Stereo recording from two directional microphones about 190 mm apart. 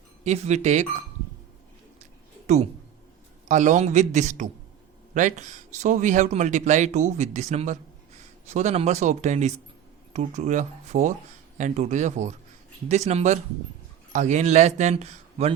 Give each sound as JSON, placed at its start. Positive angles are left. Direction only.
{"t": 0.3, "sound": "speech", "side_deg": -35}
{"t": 3.5, "sound": "speech", "side_deg": -40}